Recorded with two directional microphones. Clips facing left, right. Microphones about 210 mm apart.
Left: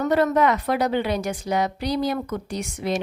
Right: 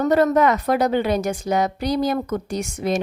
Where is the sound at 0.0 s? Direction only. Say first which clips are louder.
Right 3 dB; 40° right (ahead or behind).